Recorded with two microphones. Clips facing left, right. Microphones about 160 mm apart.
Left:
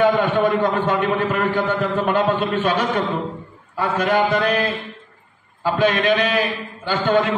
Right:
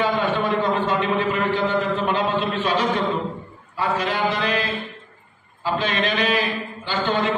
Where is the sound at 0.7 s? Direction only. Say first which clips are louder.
Left 2 dB; 50° left (ahead or behind).